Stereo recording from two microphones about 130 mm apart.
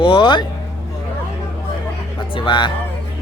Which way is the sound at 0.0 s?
35° left (ahead or behind).